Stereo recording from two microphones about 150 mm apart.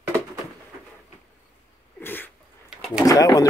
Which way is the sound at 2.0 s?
15° left (ahead or behind).